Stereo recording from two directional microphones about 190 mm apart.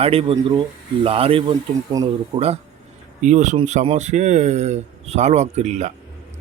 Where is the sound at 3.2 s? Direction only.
40° right (ahead or behind).